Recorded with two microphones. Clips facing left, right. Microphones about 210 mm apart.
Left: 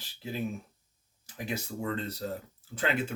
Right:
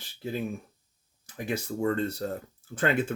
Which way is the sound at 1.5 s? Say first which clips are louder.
Right 6 dB; 50° right (ahead or behind).